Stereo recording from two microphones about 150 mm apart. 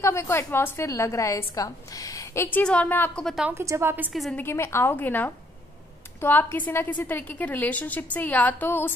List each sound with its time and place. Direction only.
0.0 s a woman's voice: 20° left (ahead or behind)
3.5 s a woman's voice: 20° right (ahead or behind)
4.1 s a woman's voice: centre (ahead or behind)
4.4 s a woman's voice: 15° left (ahead or behind)